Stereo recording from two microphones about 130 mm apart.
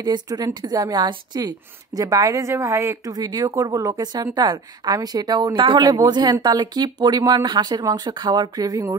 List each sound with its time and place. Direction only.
0.0 s a woman's voice: 30° right (ahead or behind)